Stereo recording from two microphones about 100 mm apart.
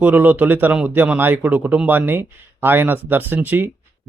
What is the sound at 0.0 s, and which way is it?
A man's voice, 15° right (ahead or behind).